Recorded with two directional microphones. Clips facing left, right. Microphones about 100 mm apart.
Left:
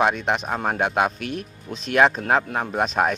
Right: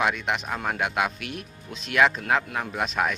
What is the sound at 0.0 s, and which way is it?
Speech, 35° left (ahead or behind).